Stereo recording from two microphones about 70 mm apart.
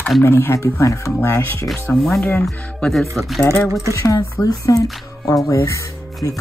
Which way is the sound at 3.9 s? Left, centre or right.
Left.